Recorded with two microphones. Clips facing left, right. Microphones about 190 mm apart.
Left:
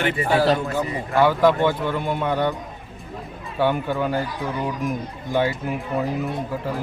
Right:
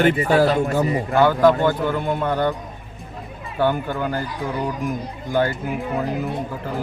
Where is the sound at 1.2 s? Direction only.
Centre (ahead or behind).